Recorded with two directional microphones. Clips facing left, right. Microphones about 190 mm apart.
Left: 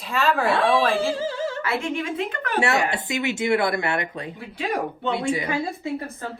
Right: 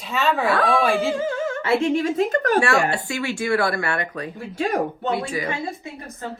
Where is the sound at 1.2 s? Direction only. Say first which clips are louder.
Right 2 dB; 30° left (ahead or behind).